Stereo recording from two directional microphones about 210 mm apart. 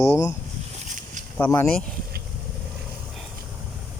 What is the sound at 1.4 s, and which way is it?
Speech, 10° left (ahead or behind).